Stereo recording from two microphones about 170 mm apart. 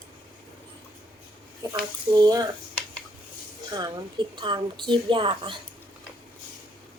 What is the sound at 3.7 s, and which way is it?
A woman's voice, 25° right (ahead or behind).